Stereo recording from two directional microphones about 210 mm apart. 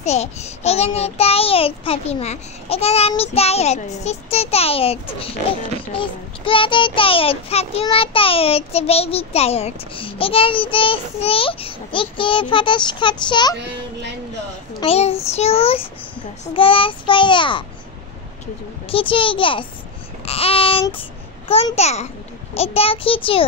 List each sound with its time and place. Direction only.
0.0 s a child's voice: 30° left (ahead or behind)
14.8 s a child's voice: 30° left (ahead or behind)
18.9 s a child's voice: 25° left (ahead or behind)